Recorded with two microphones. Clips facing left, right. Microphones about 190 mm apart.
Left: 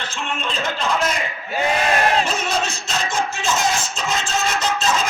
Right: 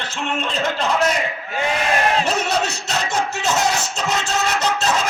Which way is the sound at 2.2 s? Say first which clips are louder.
Right 2 dB; 70° right (ahead or behind).